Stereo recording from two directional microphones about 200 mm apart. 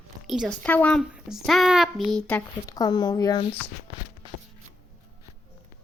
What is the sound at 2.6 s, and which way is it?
Speech, 20° left (ahead or behind).